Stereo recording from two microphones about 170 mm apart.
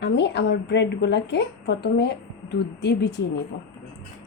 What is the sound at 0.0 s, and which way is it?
A woman's voice, 90° left.